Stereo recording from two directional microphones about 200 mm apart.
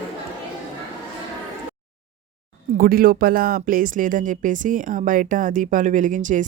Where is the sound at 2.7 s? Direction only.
45° right (ahead or behind).